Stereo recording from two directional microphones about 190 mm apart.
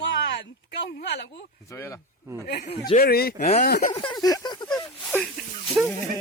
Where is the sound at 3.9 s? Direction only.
25° left (ahead or behind).